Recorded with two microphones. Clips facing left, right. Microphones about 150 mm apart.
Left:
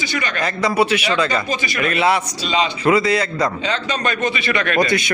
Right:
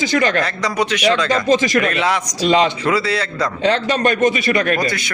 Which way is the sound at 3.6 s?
60° right (ahead or behind).